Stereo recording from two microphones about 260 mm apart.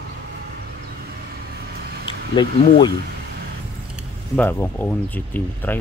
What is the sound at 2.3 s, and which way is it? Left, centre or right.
Speech, centre.